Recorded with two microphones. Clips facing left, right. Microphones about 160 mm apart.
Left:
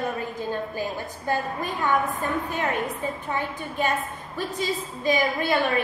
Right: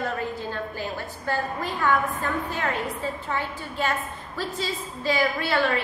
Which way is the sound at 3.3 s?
20° left (ahead or behind).